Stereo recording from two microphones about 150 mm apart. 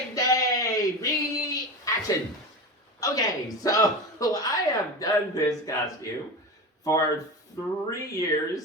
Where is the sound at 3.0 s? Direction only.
25° left (ahead or behind).